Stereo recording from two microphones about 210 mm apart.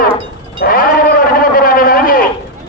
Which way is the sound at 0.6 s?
45° left (ahead or behind).